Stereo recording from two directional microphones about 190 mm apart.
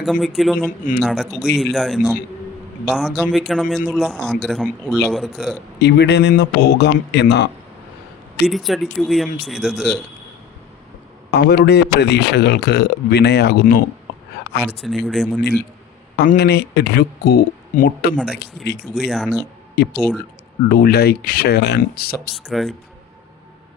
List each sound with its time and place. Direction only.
0.0 s speech: centre (ahead or behind)
5.8 s a man's voice: 60° left (ahead or behind)
8.4 s speech: centre (ahead or behind)
11.3 s a man's voice: 60° left (ahead or behind)
14.6 s speech: centre (ahead or behind)
16.1 s a man's voice: 50° left (ahead or behind)
18.9 s speech: centre (ahead or behind)
19.7 s a man's voice: 60° left (ahead or behind)
22.4 s speech: centre (ahead or behind)